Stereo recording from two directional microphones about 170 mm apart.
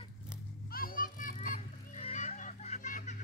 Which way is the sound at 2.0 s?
40° left (ahead or behind).